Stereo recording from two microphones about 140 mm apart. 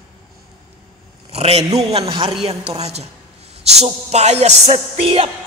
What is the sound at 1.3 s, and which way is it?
A man's voice, 45° right (ahead or behind).